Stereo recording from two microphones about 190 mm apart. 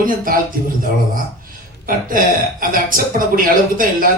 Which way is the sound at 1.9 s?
45° right (ahead or behind).